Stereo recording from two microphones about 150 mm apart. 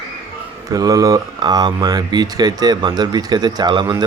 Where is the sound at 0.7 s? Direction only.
25° right (ahead or behind).